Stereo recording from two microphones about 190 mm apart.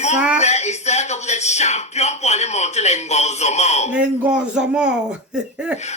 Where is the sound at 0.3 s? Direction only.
35° left (ahead or behind).